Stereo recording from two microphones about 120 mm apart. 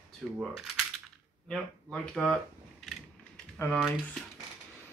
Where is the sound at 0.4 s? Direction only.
5° right (ahead or behind).